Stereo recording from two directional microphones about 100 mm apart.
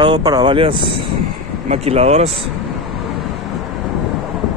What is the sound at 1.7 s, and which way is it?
Speech, 85° right.